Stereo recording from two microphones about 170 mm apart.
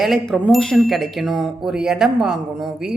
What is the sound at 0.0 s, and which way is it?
Speech, centre (ahead or behind).